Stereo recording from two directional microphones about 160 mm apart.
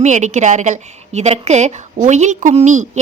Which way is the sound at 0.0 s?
45° right (ahead or behind).